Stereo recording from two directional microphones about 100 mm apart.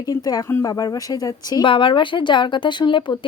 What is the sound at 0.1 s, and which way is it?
Speech, 40° left (ahead or behind).